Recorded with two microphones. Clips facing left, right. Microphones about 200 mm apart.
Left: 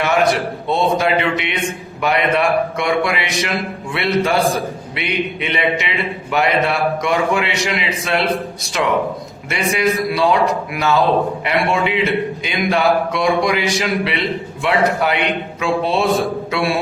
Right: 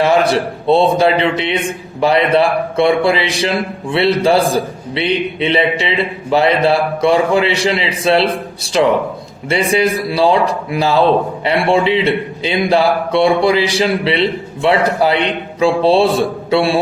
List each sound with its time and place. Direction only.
0.0 s a man's voice: 30° right (ahead or behind)